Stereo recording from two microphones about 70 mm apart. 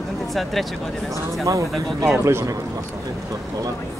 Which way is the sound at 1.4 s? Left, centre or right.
Right.